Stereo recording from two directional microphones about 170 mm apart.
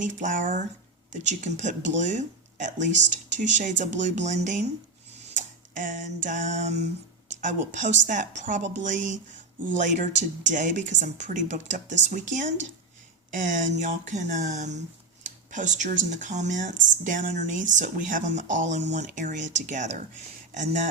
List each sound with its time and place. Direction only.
0.0 s speech: 45° right (ahead or behind)
5.3 s a sound: 45° right (ahead or behind)
7.3 s speech: 45° right (ahead or behind)